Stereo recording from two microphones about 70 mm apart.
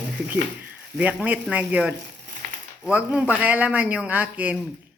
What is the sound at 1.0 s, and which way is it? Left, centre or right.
Speech, centre.